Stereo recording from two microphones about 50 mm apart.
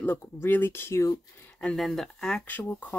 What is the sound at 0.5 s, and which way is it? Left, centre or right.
Speech, left.